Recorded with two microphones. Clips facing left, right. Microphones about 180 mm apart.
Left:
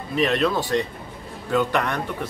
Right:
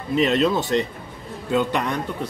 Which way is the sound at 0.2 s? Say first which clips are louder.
Right 1 dB; 25° right (ahead or behind).